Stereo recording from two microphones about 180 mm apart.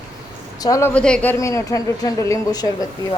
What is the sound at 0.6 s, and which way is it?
Speech, 15° left (ahead or behind).